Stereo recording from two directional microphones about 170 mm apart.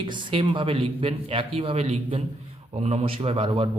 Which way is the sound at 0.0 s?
30° right (ahead or behind).